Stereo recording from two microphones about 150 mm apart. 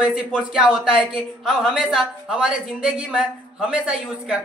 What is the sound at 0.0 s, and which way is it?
A woman's voice, 5° right (ahead or behind).